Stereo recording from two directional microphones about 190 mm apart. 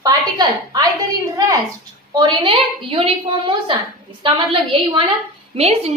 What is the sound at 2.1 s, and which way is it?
A woman's voice, 25° right (ahead or behind).